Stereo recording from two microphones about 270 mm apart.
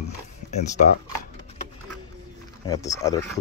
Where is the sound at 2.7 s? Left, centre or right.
Centre.